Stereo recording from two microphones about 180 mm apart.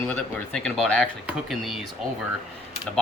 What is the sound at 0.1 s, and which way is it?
Speech, 5° left (ahead or behind).